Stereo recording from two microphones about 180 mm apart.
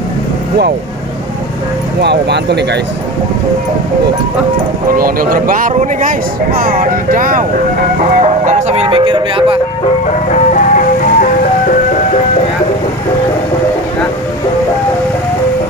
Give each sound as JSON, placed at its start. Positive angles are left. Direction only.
{"t": 2.0, "sound": "speech", "side_deg": -70}
{"t": 4.9, "sound": "speech", "side_deg": -55}
{"t": 10.3, "sound": "music", "side_deg": 45}